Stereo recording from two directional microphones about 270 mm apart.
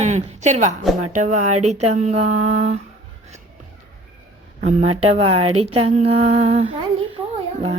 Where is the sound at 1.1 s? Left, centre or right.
Right.